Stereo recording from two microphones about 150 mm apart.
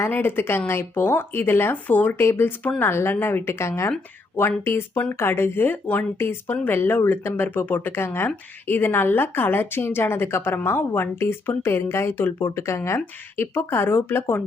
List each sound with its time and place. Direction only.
0.0 s a woman's voice: 15° left (ahead or behind)